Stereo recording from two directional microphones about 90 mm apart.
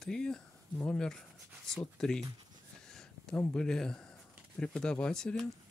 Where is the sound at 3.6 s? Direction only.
10° left (ahead or behind).